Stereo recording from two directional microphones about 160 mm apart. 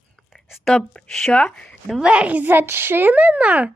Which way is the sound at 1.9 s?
5° right (ahead or behind).